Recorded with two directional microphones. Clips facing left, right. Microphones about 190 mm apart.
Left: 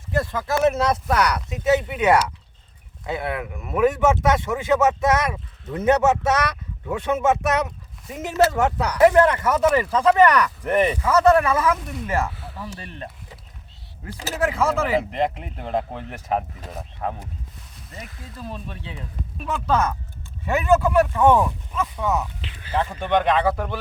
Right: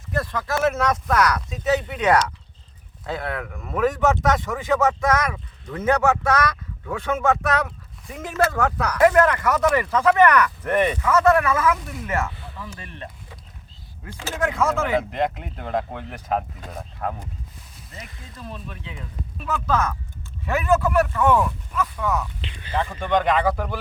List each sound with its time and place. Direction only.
0.1 s speech: 25° left (ahead or behind)
1.9 s speech: 10° left (ahead or behind); by 10.4 s 30° left (ahead or behind)
10.6 s speech: 15° left (ahead or behind)
11.0 s speech: 30° left (ahead or behind)
12.3 s a sound: 5° left (ahead or behind)
12.5 s speech: 35° left (ahead or behind)
14.1 s speech: 40° left (ahead or behind)
14.3 s speech: 5° left (ahead or behind)
19.5 s speech: 30° left (ahead or behind)
21.0 s speech: 25° left (ahead or behind)
22.4 s speech: 5° left (ahead or behind)